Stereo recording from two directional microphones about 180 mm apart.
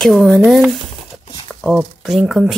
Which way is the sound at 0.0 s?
5° left (ahead or behind).